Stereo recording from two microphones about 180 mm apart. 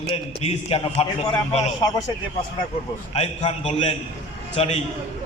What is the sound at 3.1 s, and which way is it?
A man's voice, 35° left (ahead or behind).